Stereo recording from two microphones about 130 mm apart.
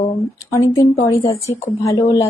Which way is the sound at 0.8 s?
25° left (ahead or behind).